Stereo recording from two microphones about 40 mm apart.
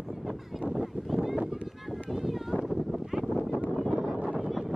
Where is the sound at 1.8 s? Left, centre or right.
Centre.